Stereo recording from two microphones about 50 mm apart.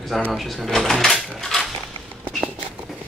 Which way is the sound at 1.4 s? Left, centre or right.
Centre.